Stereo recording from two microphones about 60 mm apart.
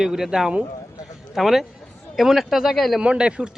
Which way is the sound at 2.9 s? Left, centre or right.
Centre.